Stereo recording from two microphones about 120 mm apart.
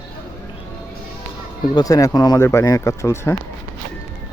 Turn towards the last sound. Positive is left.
turn(degrees=20)  # may be behind; listen again after turning